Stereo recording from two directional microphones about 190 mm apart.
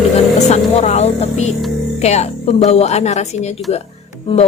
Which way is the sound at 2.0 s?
35° left (ahead or behind).